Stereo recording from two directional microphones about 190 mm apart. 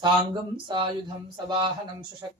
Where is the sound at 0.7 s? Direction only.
25° right (ahead or behind).